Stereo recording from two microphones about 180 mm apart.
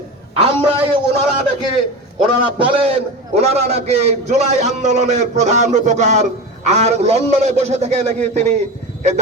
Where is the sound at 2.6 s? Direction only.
35° right (ahead or behind).